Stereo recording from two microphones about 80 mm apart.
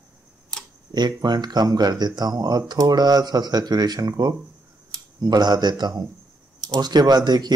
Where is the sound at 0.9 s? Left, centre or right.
Right.